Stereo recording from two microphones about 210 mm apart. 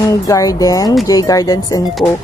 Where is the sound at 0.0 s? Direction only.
15° left (ahead or behind).